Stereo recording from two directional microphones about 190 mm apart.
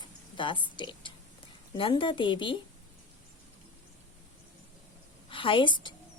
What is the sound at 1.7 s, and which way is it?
Speech, 25° left (ahead or behind).